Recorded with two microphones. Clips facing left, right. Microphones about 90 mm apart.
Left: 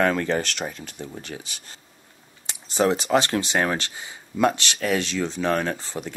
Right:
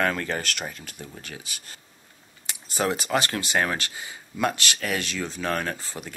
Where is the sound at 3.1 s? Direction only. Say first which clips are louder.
Left 4 dB; 20° left (ahead or behind).